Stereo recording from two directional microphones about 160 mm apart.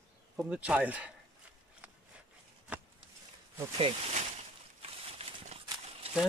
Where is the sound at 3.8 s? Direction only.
40° right (ahead or behind).